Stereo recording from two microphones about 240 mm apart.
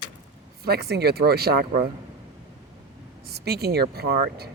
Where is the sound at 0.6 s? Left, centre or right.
Right.